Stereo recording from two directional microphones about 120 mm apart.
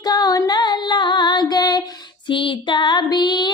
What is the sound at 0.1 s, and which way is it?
Female singing, 35° left (ahead or behind).